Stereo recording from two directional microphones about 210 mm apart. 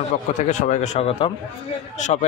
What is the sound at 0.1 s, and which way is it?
A man's voice, 35° left (ahead or behind).